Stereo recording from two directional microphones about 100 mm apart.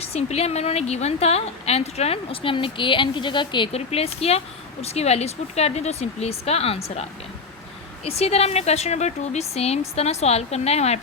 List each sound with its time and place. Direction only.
0.0 s a woman's voice: 90° left; by 3.7 s 50° left (ahead or behind)
3.7 s a woman's voice: 90° left
8.0 s a woman's voice: 90° left